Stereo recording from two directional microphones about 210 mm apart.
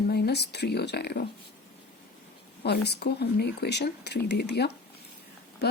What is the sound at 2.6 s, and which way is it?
A woman's voice, 50° left (ahead or behind).